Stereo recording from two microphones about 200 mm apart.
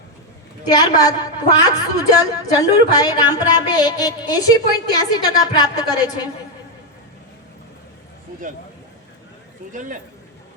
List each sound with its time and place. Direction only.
0.6 s a woman's voice: 20° left (ahead or behind)